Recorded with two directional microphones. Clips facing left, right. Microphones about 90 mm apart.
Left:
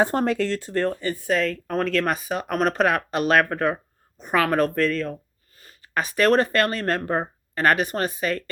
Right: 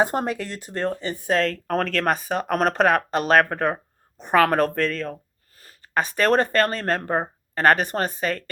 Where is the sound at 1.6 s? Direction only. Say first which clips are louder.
Even; 45° right (ahead or behind).